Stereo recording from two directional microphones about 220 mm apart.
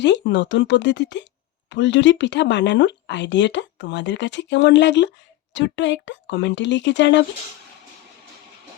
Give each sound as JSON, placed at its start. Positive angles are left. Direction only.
{"t": 0.0, "sound": "speech", "side_deg": 55}